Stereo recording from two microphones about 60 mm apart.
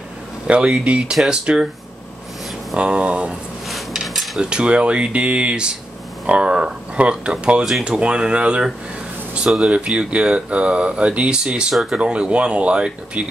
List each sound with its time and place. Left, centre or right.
0.5 s speech: centre
1.1 s speech: centre
2.7 s speech: centre
3.6 s a sound: centre
4.4 s speech: centre
12.0 s speech: centre